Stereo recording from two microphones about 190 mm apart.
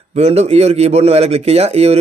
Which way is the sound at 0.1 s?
35° right (ahead or behind).